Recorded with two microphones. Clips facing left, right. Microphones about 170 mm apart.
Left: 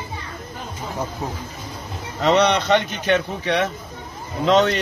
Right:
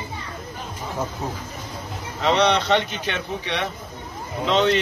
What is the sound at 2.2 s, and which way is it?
A man's voice, 45° left (ahead or behind).